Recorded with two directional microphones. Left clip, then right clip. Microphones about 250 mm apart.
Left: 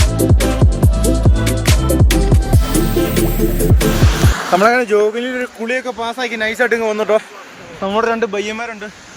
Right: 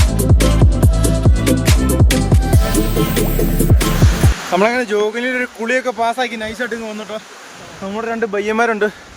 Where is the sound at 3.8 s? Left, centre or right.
Centre.